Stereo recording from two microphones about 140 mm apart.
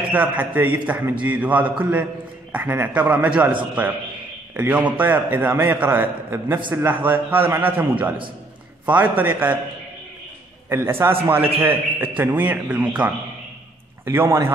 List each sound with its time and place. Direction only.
0.1 s a man's voice: 10° right (ahead or behind)
4.6 s a man's voice: 10° right (ahead or behind)
10.7 s a man's voice: 15° right (ahead or behind)